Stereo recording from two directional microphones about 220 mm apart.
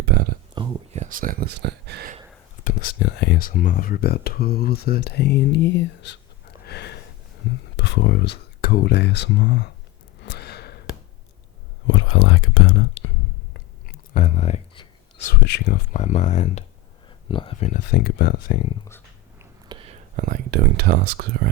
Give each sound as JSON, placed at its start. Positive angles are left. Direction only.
{"t": 0.0, "sound": "a sound", "side_deg": -45}
{"t": 0.5, "sound": "a sound", "side_deg": -20}
{"t": 1.0, "sound": "speech", "side_deg": -40}
{"t": 2.6, "sound": "speech", "side_deg": 40}
{"t": 6.7, "sound": "a sound", "side_deg": 50}
{"t": 7.8, "sound": "speech", "side_deg": 50}
{"t": 10.2, "sound": "gasp", "side_deg": 45}
{"t": 11.9, "sound": "speech", "side_deg": 70}
{"t": 14.1, "sound": "a sound", "side_deg": 35}
{"t": 15.3, "sound": "speech", "side_deg": 50}
{"t": 15.9, "sound": "speech", "side_deg": 35}
{"t": 17.7, "sound": "speech", "side_deg": 40}
{"t": 19.4, "sound": "speech", "side_deg": -20}